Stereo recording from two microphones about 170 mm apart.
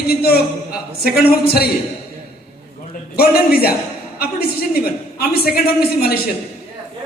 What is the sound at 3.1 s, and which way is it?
A man's voice, 65° left (ahead or behind).